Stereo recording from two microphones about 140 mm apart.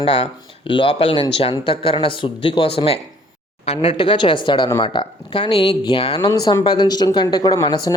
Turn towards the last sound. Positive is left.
turn(degrees=30)  # may be behind; listen again after turning